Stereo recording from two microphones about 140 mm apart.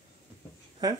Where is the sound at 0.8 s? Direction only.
25° right (ahead or behind).